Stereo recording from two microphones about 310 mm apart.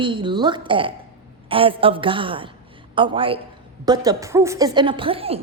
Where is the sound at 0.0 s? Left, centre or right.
Centre.